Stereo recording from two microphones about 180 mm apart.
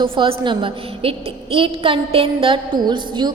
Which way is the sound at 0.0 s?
25° right (ahead or behind).